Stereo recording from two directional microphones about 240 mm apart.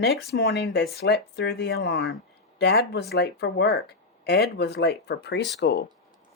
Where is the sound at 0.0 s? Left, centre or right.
Left.